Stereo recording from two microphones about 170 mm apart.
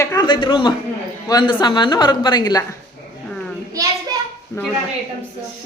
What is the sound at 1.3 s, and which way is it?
A man's voice, 25° left (ahead or behind).